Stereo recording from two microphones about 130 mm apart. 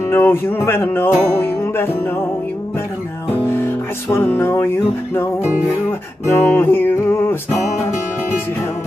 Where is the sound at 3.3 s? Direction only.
20° left (ahead or behind).